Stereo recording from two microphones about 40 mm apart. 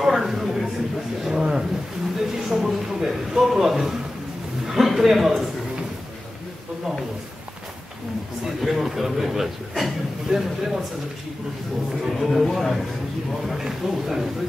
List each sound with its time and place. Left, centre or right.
0.0 s a sound: centre
1.2 s speech: centre
2.1 s a sound: centre
4.6 s a man's voice: centre
8.5 s a man's voice: centre
12.1 s speech: centre